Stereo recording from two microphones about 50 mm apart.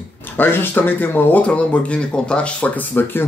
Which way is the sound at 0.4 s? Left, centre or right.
Left.